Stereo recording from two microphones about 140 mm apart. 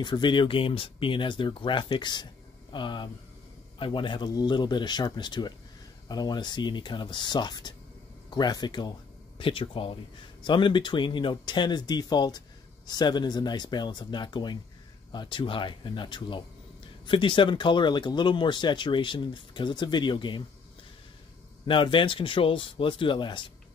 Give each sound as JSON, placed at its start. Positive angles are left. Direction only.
{"t": 0.0, "sound": "speech", "side_deg": 35}
{"t": 21.6, "sound": "speech", "side_deg": 35}